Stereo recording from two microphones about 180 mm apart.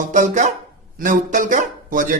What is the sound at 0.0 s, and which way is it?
A man's voice, 45° right (ahead or behind).